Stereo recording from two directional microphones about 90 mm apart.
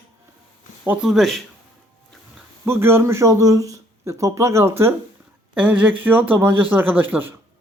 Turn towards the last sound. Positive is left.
turn(degrees=-20)  # may be behind; listen again after turning